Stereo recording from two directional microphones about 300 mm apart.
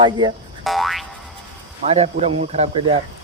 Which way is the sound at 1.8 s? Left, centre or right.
Right.